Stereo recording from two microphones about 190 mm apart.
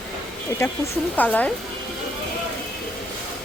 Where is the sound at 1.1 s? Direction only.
10° left (ahead or behind).